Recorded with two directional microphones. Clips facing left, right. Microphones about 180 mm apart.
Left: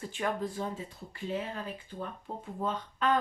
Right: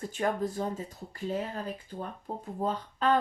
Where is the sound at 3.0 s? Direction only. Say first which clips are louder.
Right 2 dB; 35° right (ahead or behind).